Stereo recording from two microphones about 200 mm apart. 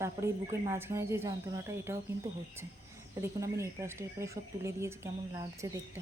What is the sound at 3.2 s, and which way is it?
A woman's voice, 15° right (ahead or behind).